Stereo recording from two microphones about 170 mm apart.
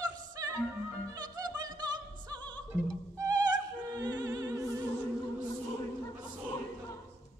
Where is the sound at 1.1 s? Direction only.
20° right (ahead or behind).